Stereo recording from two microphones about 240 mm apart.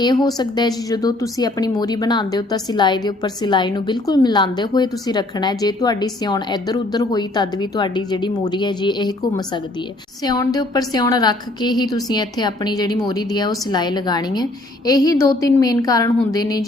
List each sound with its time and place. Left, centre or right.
0.0 s a woman's voice: centre